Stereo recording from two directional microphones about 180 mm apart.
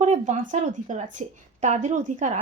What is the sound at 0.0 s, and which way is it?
Speech, 40° right (ahead or behind).